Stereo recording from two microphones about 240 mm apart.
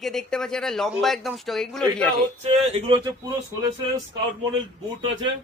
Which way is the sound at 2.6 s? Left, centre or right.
Right.